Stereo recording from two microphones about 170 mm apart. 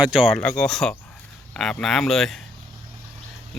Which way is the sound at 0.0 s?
Centre (ahead or behind).